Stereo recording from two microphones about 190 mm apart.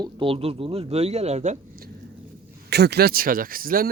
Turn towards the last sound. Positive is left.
turn(degrees=-50)  # may be behind; listen again after turning